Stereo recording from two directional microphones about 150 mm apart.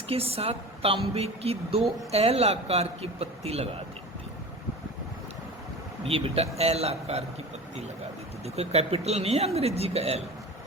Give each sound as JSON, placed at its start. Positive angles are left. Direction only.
{"t": 0.1, "sound": "a woman's voice", "side_deg": -40}
{"t": 6.1, "sound": "a woman's voice", "side_deg": -40}
{"t": 8.4, "sound": "speech", "side_deg": -45}